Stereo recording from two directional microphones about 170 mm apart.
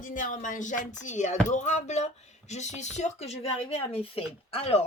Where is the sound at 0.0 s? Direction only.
50° left (ahead or behind).